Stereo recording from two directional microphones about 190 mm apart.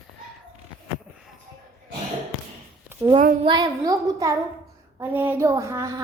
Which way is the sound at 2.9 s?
10° right (ahead or behind).